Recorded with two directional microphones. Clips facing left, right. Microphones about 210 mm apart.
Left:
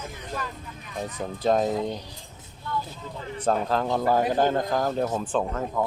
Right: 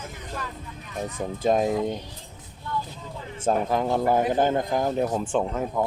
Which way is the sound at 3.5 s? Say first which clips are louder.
Right 1 dB; 15° right (ahead or behind).